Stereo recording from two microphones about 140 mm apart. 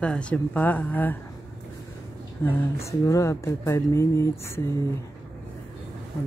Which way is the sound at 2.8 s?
20° left (ahead or behind).